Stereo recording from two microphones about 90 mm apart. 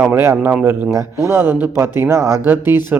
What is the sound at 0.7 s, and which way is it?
Speech, 30° right (ahead or behind).